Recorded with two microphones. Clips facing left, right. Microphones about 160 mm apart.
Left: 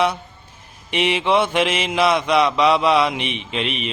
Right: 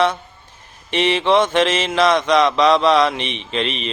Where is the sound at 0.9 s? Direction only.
10° left (ahead or behind).